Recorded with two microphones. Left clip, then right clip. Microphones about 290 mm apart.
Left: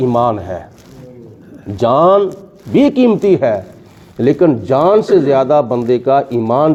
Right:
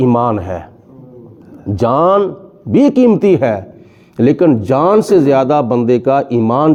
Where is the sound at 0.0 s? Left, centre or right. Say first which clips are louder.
Even; right.